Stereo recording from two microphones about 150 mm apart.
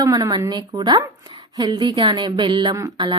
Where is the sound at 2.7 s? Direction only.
25° right (ahead or behind).